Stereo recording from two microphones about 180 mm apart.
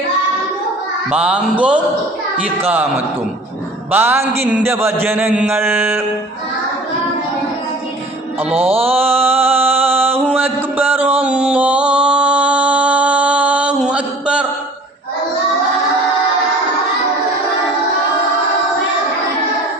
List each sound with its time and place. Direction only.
1.1 s a sound: 5° right (ahead or behind)
8.5 s music: 35° right (ahead or behind)
8.9 s mantra: 10° right (ahead or behind)